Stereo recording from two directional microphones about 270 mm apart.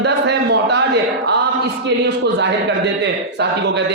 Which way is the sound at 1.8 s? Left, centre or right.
Right.